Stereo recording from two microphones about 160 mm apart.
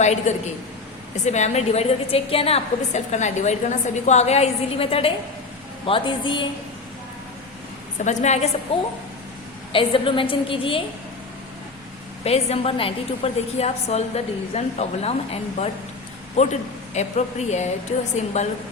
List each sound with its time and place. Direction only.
0.0 s a woman's voice: 45° left (ahead or behind)
8.0 s a woman's voice: 45° left (ahead or behind)
12.2 s a woman's voice: 40° left (ahead or behind)